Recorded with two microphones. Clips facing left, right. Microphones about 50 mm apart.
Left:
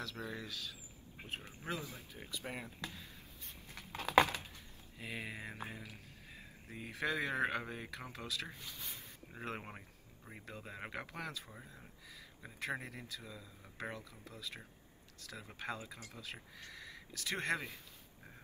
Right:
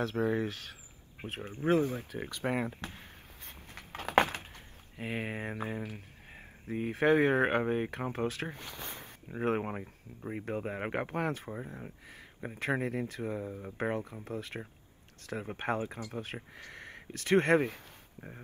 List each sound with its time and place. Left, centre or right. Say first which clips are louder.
0.0 s speech: right 14 dB; right
1.2 s a sound: right 12 dB; right
4.9 s speech: right 8 dB; right
9.7 s speech: right 12 dB; right